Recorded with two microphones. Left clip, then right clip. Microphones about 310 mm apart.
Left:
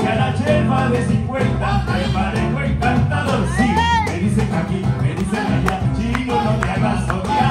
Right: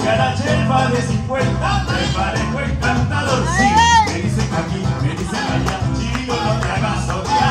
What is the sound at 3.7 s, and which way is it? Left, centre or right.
Music, centre.